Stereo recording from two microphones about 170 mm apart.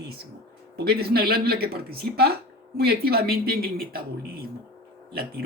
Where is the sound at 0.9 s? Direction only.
65° right (ahead or behind).